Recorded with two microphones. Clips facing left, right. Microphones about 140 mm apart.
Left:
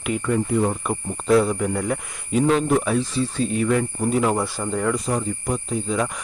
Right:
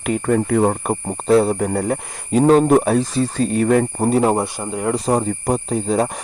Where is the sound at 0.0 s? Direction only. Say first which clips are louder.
Right 4 dB; 45° right (ahead or behind).